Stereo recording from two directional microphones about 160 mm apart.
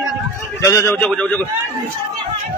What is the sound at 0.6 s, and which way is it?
Speech, 15° left (ahead or behind).